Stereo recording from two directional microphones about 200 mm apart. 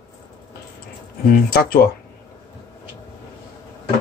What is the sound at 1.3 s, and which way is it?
Speech, 50° left (ahead or behind).